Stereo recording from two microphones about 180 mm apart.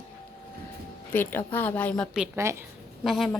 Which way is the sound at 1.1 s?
10° left (ahead or behind).